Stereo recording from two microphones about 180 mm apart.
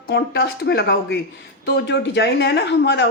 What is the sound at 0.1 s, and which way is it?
Speech, 65° left (ahead or behind).